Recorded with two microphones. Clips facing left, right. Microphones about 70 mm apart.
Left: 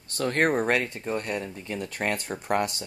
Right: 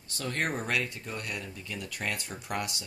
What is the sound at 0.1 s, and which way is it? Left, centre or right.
Speech, left.